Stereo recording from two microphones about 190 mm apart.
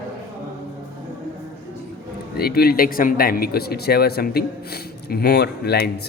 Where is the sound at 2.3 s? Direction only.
55° left (ahead or behind).